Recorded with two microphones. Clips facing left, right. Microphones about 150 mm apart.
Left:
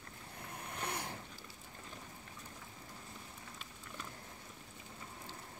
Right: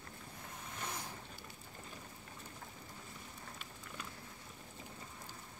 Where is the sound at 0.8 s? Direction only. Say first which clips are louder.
Left 3 dB; 65° left (ahead or behind).